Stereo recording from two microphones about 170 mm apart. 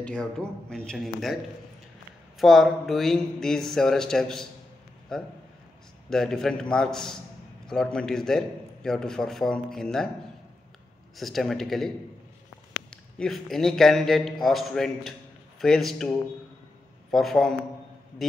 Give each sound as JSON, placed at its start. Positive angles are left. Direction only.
{"t": 0.0, "sound": "a man's voice", "side_deg": 5}
{"t": 11.1, "sound": "a man's voice", "side_deg": 0}
{"t": 12.9, "sound": "a man's voice", "side_deg": 5}